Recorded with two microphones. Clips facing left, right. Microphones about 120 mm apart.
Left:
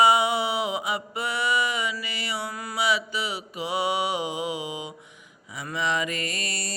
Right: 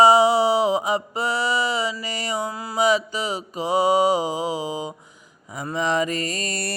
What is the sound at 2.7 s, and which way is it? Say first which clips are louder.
Mantra: right 6 dB; 40° right (ahead or behind).